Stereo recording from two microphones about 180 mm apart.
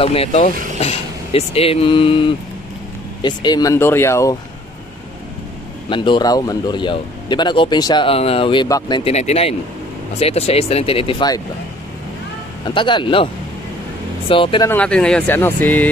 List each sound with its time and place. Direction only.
0.0 s speech: 35° left (ahead or behind); by 4.4 s 15° left (ahead or behind)
5.9 s a man's voice: 25° left (ahead or behind)
9.1 s speech: 35° left (ahead or behind)
12.6 s a man's voice: 25° left (ahead or behind)
14.3 s a man's voice: 30° left (ahead or behind)
14.7 s speech: 5° left (ahead or behind)